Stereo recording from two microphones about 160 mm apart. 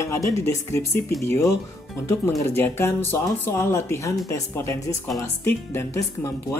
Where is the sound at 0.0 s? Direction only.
15° left (ahead or behind).